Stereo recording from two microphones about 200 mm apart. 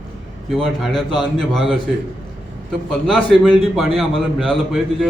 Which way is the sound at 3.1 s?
Centre (ahead or behind).